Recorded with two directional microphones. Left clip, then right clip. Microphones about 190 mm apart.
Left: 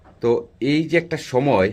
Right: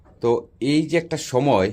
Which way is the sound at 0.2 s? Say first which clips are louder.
Left 1 dB; 10° right (ahead or behind).